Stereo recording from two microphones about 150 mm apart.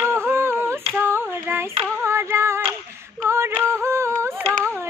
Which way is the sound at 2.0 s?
15° right (ahead or behind).